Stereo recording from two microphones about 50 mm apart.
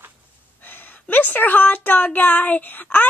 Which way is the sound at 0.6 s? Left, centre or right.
Left.